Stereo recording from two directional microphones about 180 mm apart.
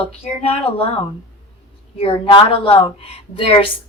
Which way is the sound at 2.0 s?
30° left (ahead or behind).